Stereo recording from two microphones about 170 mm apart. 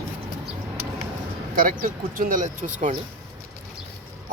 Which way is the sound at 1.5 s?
55° right (ahead or behind).